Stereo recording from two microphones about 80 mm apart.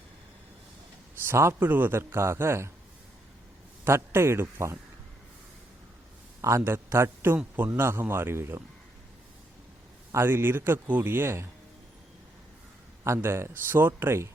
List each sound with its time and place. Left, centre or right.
1.2 s a man's voice: right
3.8 s a man's voice: right
6.4 s a man's voice: right
10.1 s speech: right
13.1 s speech: right